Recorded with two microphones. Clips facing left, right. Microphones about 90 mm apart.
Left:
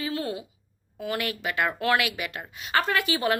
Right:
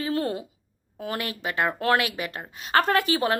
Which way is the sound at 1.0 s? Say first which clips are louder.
Left 1 dB; 35° right (ahead or behind).